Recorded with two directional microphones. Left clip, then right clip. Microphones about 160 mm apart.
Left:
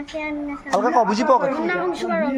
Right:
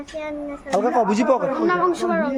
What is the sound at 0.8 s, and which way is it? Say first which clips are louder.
Speech: left 1 dB; 45° right (ahead or behind).